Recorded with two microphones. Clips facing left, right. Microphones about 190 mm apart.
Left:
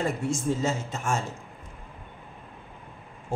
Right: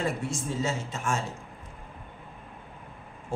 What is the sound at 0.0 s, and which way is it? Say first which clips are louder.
Speech: left 3 dB; 45° left (ahead or behind).